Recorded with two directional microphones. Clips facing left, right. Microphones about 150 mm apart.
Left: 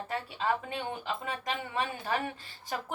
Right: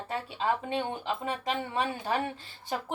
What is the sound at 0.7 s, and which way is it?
A woman's voice, 35° right (ahead or behind).